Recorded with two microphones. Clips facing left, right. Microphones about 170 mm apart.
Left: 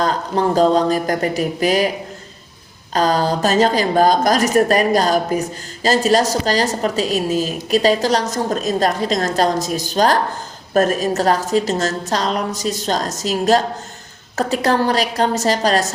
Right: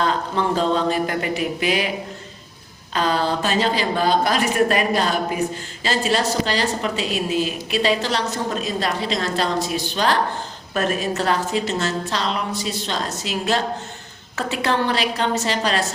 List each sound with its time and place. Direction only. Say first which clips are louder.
0.0 s a woman's voice: left 3 dB; 40° left (ahead or behind)
2.9 s a woman's voice: left 4 dB; 40° left (ahead or behind)